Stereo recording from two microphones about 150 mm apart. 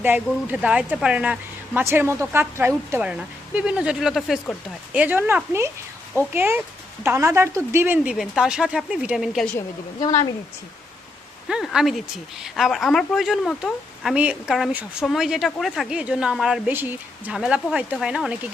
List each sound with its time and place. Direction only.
0.3 s speech: 5° right (ahead or behind)
8.1 s a woman's voice: centre (ahead or behind)
11.4 s a woman's voice: 5° right (ahead or behind)